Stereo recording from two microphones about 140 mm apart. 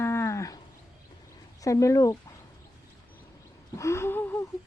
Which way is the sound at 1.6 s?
25° left (ahead or behind).